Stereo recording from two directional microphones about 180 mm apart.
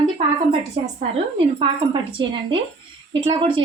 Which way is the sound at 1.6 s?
25° right (ahead or behind).